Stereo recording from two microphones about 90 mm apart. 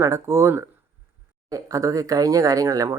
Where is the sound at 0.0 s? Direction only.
35° right (ahead or behind).